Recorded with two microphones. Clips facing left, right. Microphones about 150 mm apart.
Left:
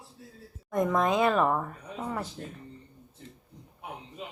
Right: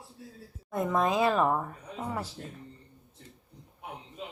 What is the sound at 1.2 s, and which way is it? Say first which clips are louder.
Speech: left 1 dB; 5° right (ahead or behind).